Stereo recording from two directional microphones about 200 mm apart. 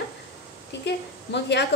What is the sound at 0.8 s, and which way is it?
Speech, 60° left (ahead or behind).